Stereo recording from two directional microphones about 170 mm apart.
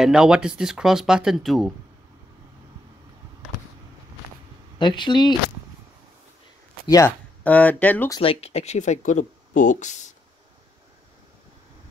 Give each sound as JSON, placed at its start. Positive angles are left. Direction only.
{"t": 0.0, "sound": "speech", "side_deg": -5}
{"t": 4.7, "sound": "speech", "side_deg": 25}
{"t": 6.9, "sound": "speech", "side_deg": 15}
{"t": 8.2, "sound": "speech", "side_deg": 35}